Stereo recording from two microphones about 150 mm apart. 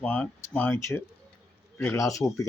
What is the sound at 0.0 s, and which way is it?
Speech, 10° left (ahead or behind).